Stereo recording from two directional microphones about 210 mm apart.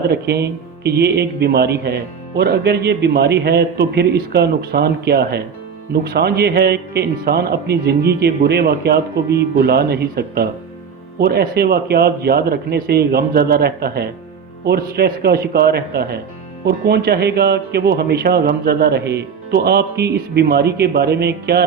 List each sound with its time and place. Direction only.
0.1 s speech: 50° right (ahead or behind)